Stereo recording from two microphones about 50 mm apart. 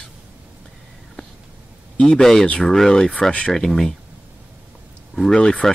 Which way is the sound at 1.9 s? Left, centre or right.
Centre.